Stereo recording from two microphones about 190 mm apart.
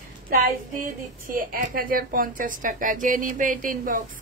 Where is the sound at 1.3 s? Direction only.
45° right (ahead or behind).